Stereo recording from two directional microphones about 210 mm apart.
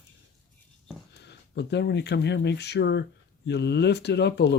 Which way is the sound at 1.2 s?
55° left (ahead or behind).